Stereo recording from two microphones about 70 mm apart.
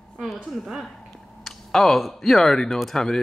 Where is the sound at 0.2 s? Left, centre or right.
Centre.